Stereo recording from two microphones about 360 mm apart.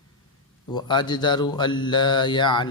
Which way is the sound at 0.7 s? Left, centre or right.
Centre.